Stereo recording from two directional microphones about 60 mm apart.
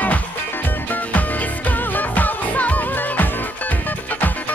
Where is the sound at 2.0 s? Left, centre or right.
Left.